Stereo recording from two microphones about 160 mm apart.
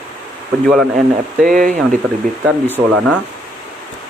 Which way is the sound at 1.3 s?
55° right (ahead or behind).